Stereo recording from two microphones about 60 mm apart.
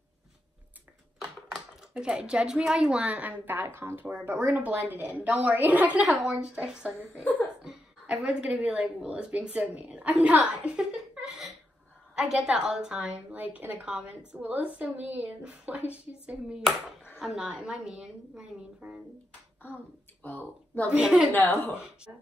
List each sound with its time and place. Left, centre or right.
1.8 s a woman's voice: centre; by 3.6 s right
3.6 s a woman's voice: right; by 6.9 s centre
7.6 s a sound: centre
8.5 s a woman's voice: right
11.2 s a sound: centre
12.2 s a woman's voice: centre
20.2 s speech: left